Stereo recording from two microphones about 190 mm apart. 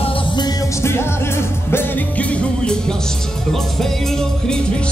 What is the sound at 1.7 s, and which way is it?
Music, 10° left (ahead or behind).